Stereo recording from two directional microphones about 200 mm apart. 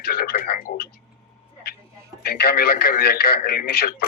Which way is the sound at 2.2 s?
50° left (ahead or behind).